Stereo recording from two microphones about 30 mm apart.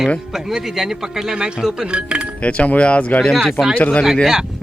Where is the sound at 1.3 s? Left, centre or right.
Right.